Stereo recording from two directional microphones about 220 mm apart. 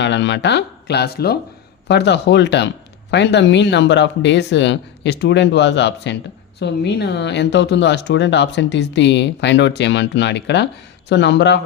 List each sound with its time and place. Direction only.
0.0 s speech: 55° left (ahead or behind)